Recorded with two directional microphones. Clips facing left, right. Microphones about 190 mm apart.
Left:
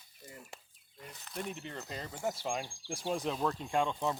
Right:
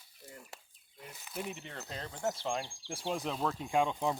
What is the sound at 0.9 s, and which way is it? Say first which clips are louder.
Speech: even; 5° right (ahead or behind).